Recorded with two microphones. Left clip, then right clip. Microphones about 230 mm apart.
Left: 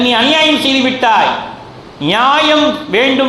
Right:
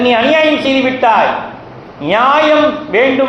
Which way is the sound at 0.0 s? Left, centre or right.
Left.